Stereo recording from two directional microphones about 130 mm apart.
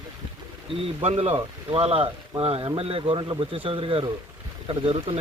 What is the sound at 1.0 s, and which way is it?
Speech, 50° right (ahead or behind).